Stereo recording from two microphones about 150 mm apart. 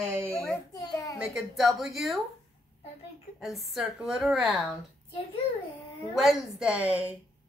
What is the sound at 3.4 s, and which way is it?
A woman's voice, centre (ahead or behind).